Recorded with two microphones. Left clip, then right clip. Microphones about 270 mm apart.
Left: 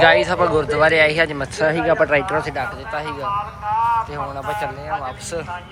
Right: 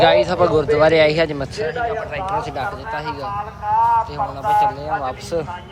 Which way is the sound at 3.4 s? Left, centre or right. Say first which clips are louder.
Right 4 dB; right.